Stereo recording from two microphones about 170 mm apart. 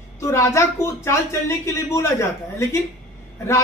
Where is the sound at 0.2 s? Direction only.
15° left (ahead or behind).